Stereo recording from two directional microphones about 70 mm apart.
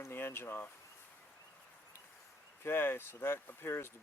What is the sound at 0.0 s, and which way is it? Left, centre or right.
Speech, left.